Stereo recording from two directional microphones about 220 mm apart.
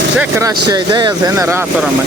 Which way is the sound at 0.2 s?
10° right (ahead or behind).